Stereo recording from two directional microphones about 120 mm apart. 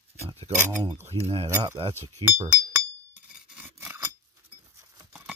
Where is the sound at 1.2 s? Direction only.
50° right (ahead or behind).